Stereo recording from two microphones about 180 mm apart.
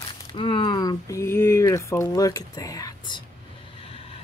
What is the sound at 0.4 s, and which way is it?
Speech, 30° left (ahead or behind).